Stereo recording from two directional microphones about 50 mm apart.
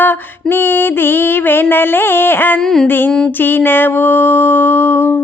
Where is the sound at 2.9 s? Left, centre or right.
Left.